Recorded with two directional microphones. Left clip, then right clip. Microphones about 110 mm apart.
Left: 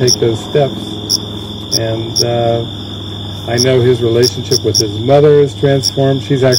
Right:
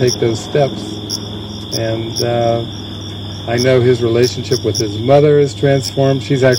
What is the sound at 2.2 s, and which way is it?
Mantra, 35° right (ahead or behind).